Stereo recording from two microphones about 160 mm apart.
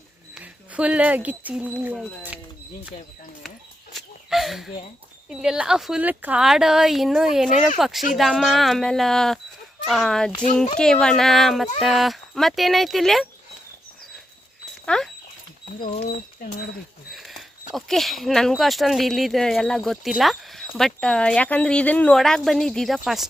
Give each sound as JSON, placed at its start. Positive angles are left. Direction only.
{"t": 0.3, "sound": "speech", "side_deg": -5}
{"t": 3.9, "sound": "a sound", "side_deg": 0}
{"t": 5.3, "sound": "speech", "side_deg": -5}
{"t": 14.8, "sound": "speech", "side_deg": 5}
{"t": 16.0, "sound": "speech", "side_deg": 65}
{"t": 17.1, "sound": "speech", "side_deg": 0}